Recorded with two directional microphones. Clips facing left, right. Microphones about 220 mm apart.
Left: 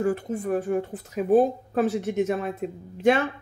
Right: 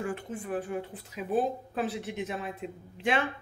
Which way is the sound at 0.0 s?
40° left (ahead or behind).